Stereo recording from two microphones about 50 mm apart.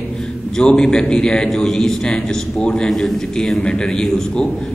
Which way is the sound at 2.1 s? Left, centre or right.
Left.